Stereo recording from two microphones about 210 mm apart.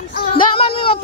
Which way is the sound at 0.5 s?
25° left (ahead or behind).